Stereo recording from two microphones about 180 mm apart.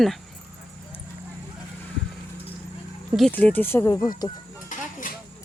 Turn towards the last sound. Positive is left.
turn(degrees=45)  # may be behind; listen again after turning